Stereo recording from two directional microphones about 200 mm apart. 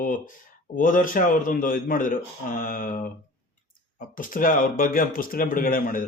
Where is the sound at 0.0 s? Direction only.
45° left (ahead or behind).